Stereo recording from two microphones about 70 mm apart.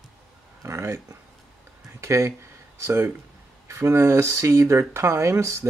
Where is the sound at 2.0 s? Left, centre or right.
Right.